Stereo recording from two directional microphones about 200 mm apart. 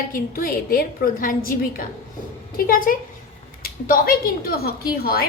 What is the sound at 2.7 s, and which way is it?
A woman's voice, 45° left (ahead or behind).